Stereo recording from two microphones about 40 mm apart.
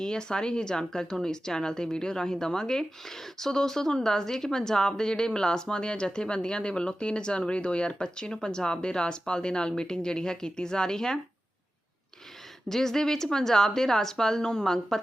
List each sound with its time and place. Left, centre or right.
0.0 s speech: centre
12.6 s speech: centre